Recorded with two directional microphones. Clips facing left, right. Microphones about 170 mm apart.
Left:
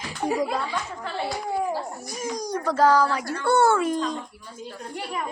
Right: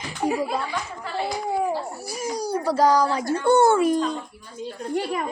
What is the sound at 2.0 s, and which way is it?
Speech, 10° right (ahead or behind).